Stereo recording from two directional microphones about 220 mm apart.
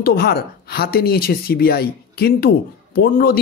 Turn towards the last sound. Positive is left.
turn(degrees=45)  # may be behind; listen again after turning